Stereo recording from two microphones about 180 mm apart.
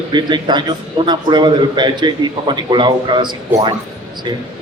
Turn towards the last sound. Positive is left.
turn(degrees=-25)  # may be behind; listen again after turning